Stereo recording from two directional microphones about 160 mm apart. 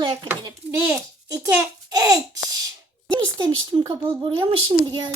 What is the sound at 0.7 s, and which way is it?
A child's voice, 15° right (ahead or behind).